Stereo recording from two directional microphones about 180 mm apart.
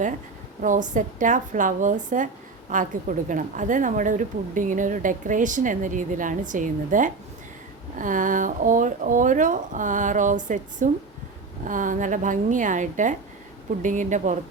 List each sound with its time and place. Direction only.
0.6 s speech: 45° right (ahead or behind)